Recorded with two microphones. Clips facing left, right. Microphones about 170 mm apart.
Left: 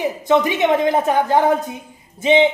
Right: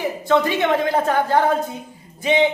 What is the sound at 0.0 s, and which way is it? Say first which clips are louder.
A woman's voice: left 2 dB; 20° left (ahead or behind).